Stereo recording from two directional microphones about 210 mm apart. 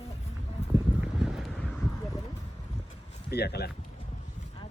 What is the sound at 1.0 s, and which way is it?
Wind noise, centre (ahead or behind).